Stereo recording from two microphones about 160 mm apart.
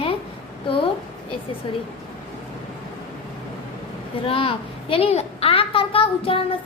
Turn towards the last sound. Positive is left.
turn(degrees=35)  # may be behind; listen again after turning